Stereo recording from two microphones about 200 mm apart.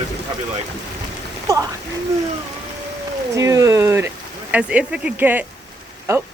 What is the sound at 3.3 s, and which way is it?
Speech, 15° right (ahead or behind).